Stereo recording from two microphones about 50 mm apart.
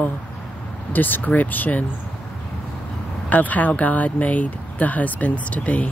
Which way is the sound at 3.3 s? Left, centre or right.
Left.